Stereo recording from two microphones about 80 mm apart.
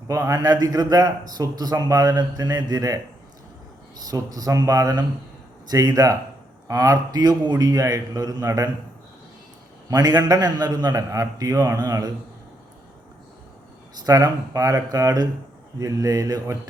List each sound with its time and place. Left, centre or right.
0.1 s a man's voice: right
4.0 s a man's voice: right
9.9 s a man's voice: right
11.1 s a man's voice: right
14.0 s a man's voice: right